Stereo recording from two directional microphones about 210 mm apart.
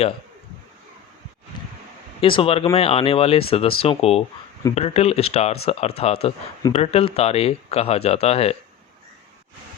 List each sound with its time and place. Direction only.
2.2 s speech: 25° left (ahead or behind)